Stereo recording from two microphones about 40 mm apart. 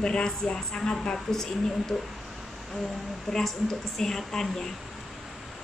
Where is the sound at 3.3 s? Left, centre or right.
Centre.